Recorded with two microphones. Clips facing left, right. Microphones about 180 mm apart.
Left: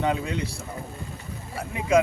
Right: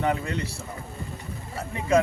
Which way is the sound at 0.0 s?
15° left (ahead or behind).